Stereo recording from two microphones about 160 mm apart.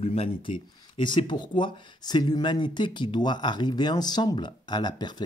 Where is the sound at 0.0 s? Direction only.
35° left (ahead or behind).